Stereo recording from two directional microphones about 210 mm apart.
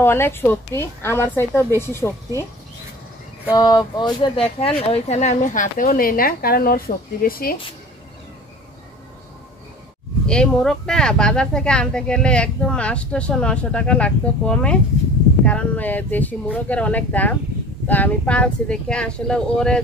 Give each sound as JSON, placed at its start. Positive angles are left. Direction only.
{"t": 0.0, "sound": "a woman's voice", "side_deg": 10}
{"t": 3.5, "sound": "speech", "side_deg": 20}
{"t": 10.2, "sound": "a woman's voice", "side_deg": 5}